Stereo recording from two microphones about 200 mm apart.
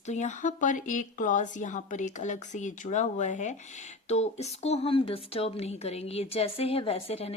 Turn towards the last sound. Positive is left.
turn(degrees=30)  # may be behind; listen again after turning